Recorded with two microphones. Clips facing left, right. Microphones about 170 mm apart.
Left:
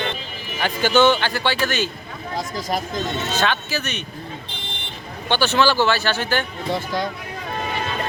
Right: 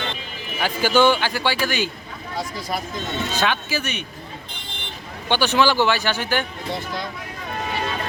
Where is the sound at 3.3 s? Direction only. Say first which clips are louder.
Right 1 dB; 10° right (ahead or behind).